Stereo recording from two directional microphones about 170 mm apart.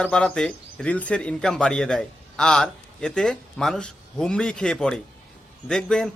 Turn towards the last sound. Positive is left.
turn(degrees=5)  # may be behind; listen again after turning